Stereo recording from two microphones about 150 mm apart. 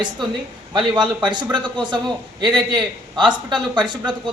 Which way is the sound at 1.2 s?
30° right (ahead or behind).